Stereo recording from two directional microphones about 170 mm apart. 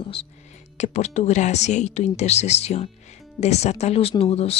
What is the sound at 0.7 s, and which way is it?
Speech, 45° left (ahead or behind).